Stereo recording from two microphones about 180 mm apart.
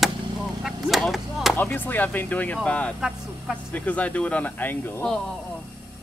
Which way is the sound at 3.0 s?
5° right (ahead or behind).